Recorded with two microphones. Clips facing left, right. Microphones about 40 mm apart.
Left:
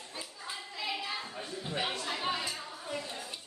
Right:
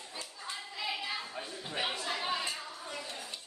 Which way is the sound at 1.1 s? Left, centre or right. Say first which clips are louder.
Even; centre.